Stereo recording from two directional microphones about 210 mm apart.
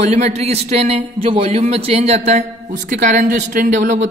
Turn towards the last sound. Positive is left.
turn(degrees=-35)  # may be behind; listen again after turning